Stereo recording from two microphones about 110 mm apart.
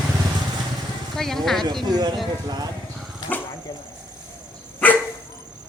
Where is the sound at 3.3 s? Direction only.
15° left (ahead or behind).